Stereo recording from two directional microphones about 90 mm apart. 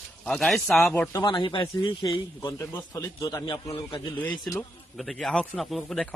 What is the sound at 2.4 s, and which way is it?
A man's voice, 35° left (ahead or behind).